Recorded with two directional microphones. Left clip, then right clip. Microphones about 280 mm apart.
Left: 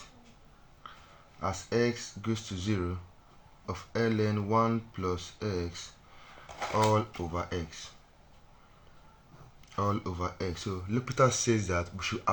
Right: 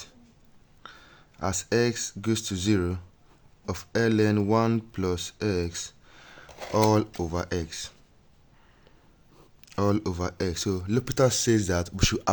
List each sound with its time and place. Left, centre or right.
1.4 s speech: right
6.7 s speech: right
9.7 s speech: right